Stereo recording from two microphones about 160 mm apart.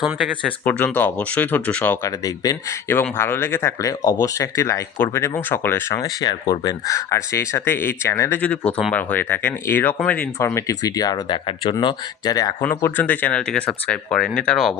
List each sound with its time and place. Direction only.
0.0 s speech: 5° right (ahead or behind)
0.4 s speech: 10° left (ahead or behind)
12.6 s speech: 10° left (ahead or behind)